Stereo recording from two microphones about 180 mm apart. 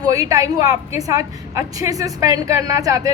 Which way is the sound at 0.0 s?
20° right (ahead or behind).